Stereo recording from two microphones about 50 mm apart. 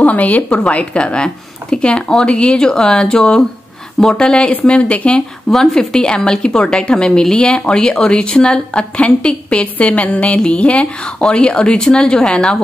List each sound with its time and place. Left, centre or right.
0.0 s a sound: left
0.5 s a woman's voice: left
5.5 s a woman's voice: centre